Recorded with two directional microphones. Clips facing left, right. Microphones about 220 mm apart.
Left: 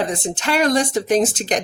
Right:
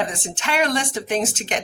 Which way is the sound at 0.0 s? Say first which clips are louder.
Left 4 dB; 40° left (ahead or behind).